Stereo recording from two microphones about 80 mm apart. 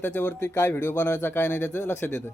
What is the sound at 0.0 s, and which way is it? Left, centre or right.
Speech, left.